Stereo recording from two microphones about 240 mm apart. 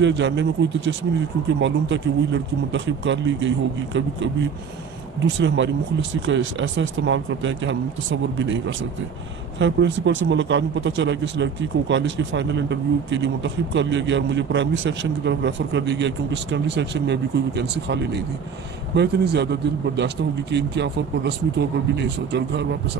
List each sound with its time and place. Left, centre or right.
0.0 s speech: right
5.4 s speech: right
9.6 s speech: right